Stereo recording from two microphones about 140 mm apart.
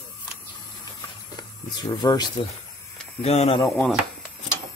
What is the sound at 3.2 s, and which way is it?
Speech, 50° left (ahead or behind).